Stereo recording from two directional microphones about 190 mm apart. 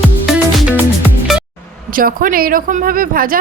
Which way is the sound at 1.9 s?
50° right (ahead or behind).